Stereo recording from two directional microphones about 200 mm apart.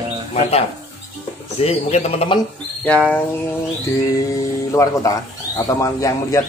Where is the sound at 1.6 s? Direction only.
30° left (ahead or behind).